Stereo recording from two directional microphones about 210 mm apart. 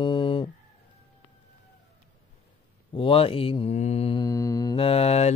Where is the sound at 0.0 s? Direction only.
25° left (ahead or behind).